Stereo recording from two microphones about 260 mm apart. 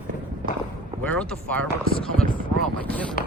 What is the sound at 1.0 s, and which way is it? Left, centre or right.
Speech, centre.